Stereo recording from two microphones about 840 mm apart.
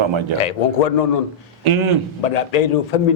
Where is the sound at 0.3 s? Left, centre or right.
Left.